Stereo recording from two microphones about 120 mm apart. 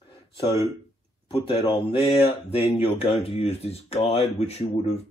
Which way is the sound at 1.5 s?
35° left (ahead or behind).